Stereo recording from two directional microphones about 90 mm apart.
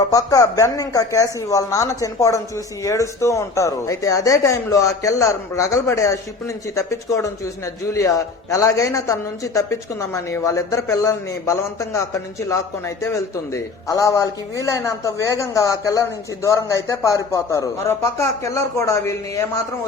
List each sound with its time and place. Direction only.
0.1 s a man's voice: 40° left (ahead or behind)